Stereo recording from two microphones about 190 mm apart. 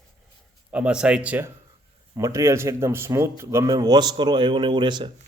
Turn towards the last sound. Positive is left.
turn(degrees=-25)  # may be behind; listen again after turning